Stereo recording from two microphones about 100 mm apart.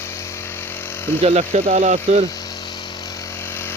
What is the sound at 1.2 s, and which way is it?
Speech, 90° right.